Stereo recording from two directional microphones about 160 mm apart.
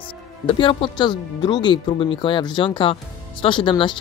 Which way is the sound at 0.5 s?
35° left (ahead or behind).